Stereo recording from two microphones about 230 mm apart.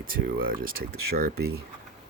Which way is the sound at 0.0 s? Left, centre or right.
Right.